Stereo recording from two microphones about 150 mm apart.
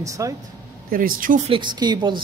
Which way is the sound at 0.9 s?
65° right (ahead or behind).